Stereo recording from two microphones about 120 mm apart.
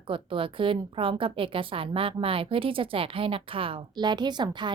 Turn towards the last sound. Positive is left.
turn(degrees=-40)  # may be behind; listen again after turning